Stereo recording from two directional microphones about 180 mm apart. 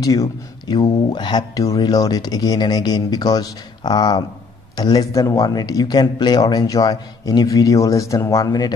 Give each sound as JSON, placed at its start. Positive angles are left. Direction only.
{"t": 0.0, "sound": "speech", "side_deg": 20}